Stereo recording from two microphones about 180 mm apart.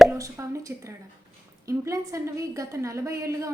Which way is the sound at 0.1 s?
15° right (ahead or behind).